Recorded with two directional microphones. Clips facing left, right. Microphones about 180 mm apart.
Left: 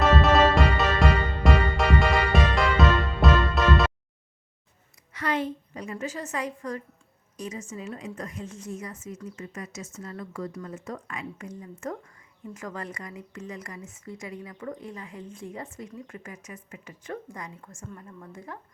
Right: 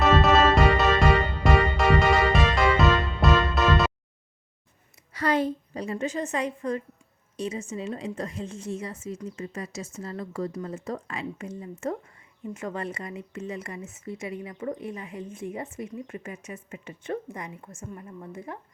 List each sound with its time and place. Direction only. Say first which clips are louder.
0.0 s music: even; centre (ahead or behind)
5.1 s a woman's voice: right 4 dB; 35° right (ahead or behind); by 18.6 s 20° right (ahead or behind)